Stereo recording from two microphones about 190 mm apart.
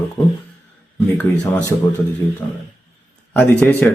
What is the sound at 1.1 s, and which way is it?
Speech, 5° left (ahead or behind).